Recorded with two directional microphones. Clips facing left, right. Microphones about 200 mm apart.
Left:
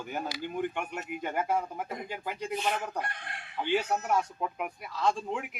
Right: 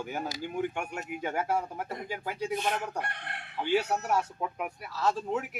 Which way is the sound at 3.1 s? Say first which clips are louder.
Right 1 dB; 65° right (ahead or behind).